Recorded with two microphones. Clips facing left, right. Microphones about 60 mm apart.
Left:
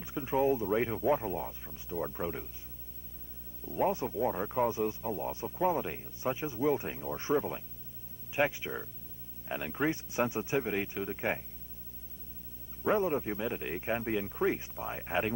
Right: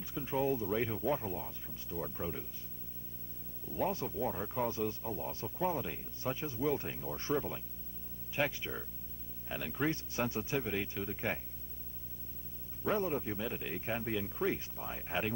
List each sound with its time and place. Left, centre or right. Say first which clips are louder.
0.0 s speech: left 5 dB; left
3.6 s speech: left 5 dB; left
12.8 s speech: left 5 dB; left